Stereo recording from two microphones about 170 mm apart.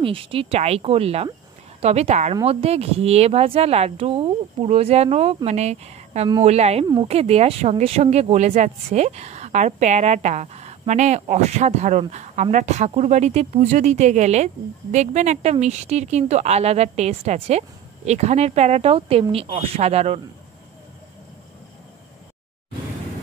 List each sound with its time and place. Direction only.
0.0 s speech: 30° right (ahead or behind)